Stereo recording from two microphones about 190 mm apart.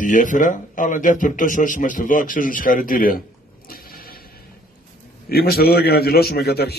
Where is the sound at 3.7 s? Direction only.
50° left (ahead or behind).